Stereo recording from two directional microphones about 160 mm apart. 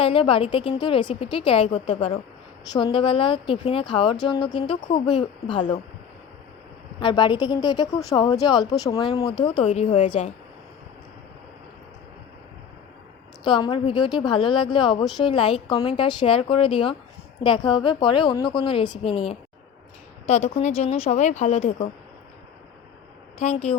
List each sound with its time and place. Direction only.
0.0 s speech: 35° left (ahead or behind)
7.0 s speech: 30° left (ahead or behind)
13.4 s speech: 30° left (ahead or behind)
23.4 s speech: 40° left (ahead or behind)